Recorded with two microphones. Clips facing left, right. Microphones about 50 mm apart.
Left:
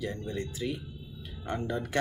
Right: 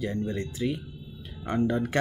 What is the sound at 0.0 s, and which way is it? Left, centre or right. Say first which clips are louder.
Speech: right 4 dB; right.